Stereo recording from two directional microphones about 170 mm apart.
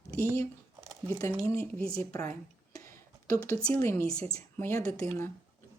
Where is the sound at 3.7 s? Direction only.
15° left (ahead or behind).